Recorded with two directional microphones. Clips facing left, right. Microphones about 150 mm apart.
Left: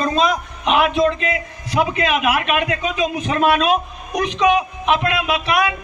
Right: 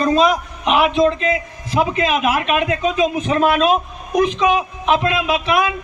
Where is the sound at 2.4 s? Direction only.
30° right (ahead or behind).